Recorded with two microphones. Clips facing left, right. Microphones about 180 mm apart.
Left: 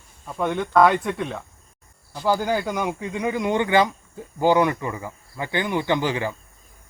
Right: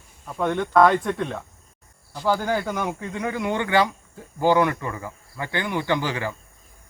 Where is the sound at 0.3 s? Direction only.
5° left (ahead or behind).